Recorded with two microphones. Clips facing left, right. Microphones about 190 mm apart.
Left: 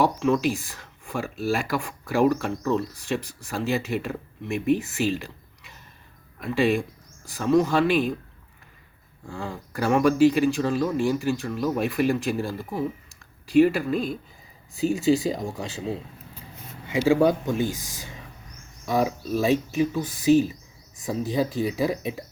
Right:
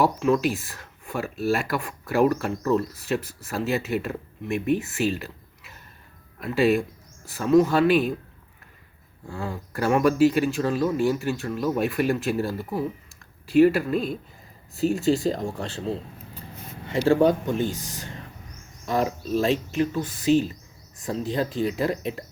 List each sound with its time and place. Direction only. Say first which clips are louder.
0.0 s speech: even; centre (ahead or behind)
9.2 s speech: right 1 dB; centre (ahead or behind)
17.7 s speech: right 4 dB; 90° left
18.9 s speech: left 1 dB; 10° left (ahead or behind)